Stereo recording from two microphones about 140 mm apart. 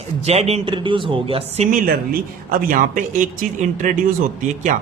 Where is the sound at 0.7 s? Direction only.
35° right (ahead or behind).